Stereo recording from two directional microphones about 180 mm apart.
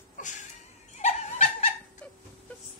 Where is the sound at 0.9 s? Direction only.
40° left (ahead or behind).